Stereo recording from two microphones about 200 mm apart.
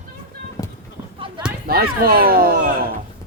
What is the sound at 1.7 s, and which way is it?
Speech, 50° right (ahead or behind).